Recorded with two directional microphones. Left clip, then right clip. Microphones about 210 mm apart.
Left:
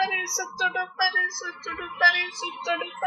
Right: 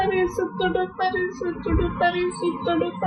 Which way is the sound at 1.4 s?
15° left (ahead or behind).